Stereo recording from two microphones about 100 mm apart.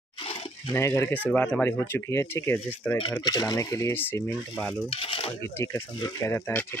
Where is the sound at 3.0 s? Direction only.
55° left (ahead or behind); by 3.9 s 35° left (ahead or behind).